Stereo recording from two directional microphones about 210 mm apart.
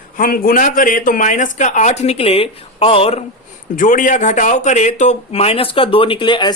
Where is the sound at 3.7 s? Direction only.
40° left (ahead or behind); by 6.5 s 20° left (ahead or behind).